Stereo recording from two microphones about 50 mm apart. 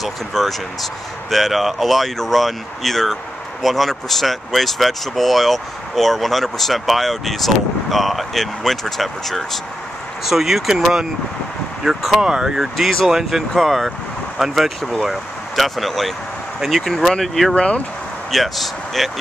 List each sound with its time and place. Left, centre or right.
0.0 s speech: centre
17.6 s speech: left
18.3 s speech: centre